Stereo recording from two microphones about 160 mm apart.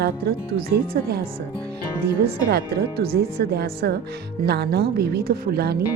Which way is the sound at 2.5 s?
75° right (ahead or behind).